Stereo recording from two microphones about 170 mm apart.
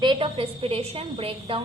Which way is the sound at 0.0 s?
30° right (ahead or behind).